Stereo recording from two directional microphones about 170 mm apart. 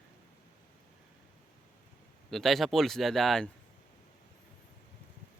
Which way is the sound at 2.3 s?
Centre (ahead or behind).